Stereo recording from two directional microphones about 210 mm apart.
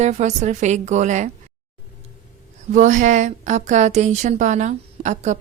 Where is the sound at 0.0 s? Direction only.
35° right (ahead or behind).